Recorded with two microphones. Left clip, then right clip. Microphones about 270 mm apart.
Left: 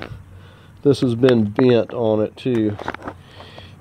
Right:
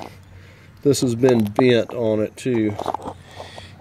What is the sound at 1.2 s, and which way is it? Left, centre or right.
Speech, left.